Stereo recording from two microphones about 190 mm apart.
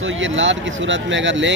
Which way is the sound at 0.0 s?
80° right.